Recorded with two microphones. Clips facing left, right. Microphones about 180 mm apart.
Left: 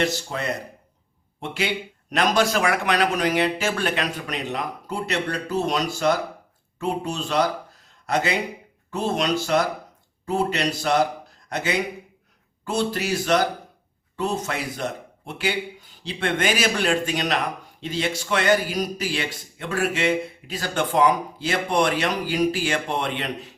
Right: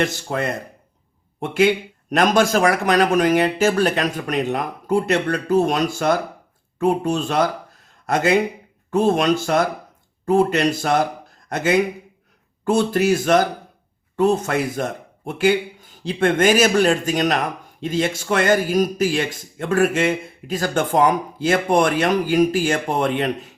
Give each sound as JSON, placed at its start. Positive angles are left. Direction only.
{"t": 0.0, "sound": "a man's voice", "side_deg": -50}